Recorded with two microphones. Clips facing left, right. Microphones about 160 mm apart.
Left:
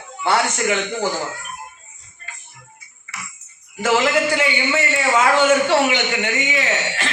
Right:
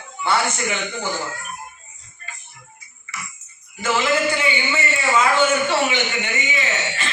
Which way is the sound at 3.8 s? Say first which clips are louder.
Left 3 dB; 70° left (ahead or behind).